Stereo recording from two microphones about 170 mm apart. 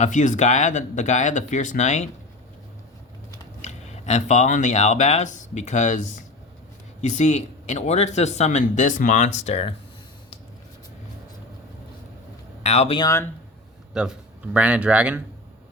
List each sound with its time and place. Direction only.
0.0 s speech: 45° left (ahead or behind)
3.6 s speech: 40° left (ahead or behind)
12.6 s speech: 40° left (ahead or behind)
13.0 s speech: 15° left (ahead or behind)
13.9 s speech: 5° right (ahead or behind)